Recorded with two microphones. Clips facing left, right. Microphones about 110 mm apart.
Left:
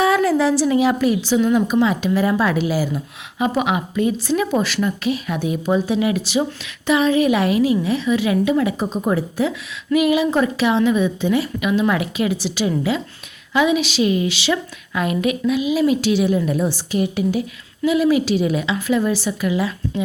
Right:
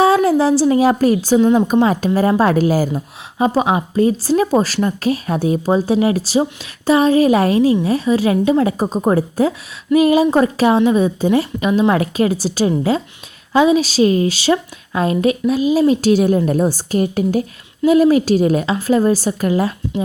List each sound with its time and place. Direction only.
0.0 s a woman's voice: 30° right (ahead or behind)
1.4 s a woman's voice: 30° right (ahead or behind)
1.6 s a woman's voice: 45° right (ahead or behind)
2.9 s a woman's voice: 35° right (ahead or behind)